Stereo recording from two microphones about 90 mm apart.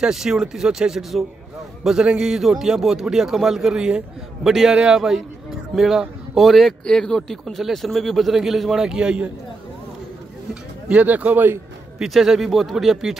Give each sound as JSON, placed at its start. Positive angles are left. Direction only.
{"t": 0.0, "sound": "speech", "side_deg": -5}
{"t": 10.5, "sound": "speech", "side_deg": -15}
{"t": 12.0, "sound": "speech", "side_deg": -5}